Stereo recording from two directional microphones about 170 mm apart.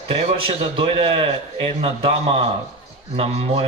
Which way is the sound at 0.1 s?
30° right (ahead or behind).